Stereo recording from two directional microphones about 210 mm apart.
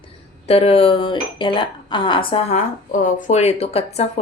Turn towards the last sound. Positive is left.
turn(degrees=30)  # may be behind; listen again after turning